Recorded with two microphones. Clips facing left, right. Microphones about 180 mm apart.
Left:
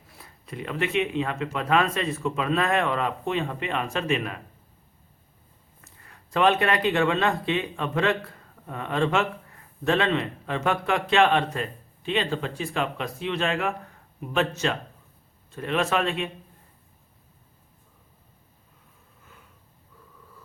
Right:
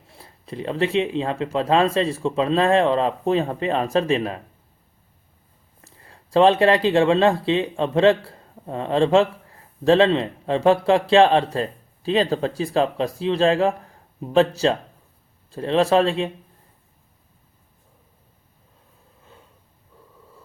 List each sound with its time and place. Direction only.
0.1 s speech: 30° right (ahead or behind)
5.8 s speech: 30° right (ahead or behind)
19.2 s wheeze: 30° right (ahead or behind)